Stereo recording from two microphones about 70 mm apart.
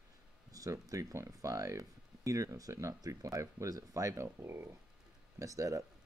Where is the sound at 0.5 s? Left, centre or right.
Right.